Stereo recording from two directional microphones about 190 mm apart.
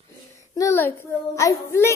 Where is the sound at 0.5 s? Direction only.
15° left (ahead or behind).